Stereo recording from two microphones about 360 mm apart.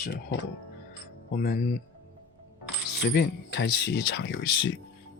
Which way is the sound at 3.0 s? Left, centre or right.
Left.